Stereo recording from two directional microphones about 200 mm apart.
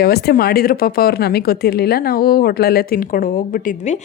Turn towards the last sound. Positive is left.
turn(degrees=40)  # may be behind; listen again after turning